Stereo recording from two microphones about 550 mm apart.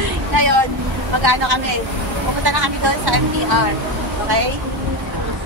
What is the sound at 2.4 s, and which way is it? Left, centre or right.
Speech, right.